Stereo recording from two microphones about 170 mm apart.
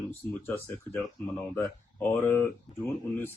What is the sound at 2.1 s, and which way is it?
Speech, 15° left (ahead or behind).